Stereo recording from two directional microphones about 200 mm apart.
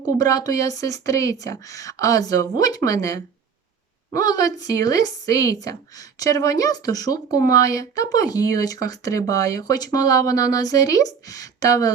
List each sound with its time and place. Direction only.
0.2 s a woman's voice: 20° left (ahead or behind)